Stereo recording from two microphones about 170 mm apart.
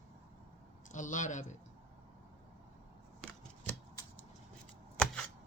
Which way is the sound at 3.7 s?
10° left (ahead or behind).